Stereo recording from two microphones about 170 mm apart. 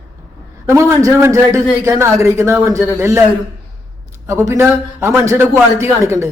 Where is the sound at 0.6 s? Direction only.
15° right (ahead or behind).